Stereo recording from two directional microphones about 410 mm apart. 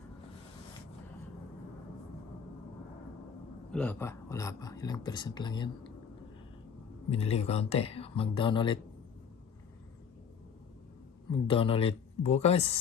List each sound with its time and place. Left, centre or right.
3.7 s speech: centre
7.1 s speech: centre
11.3 s speech: centre